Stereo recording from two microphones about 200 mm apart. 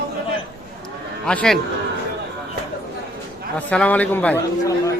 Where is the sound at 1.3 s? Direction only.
5° left (ahead or behind).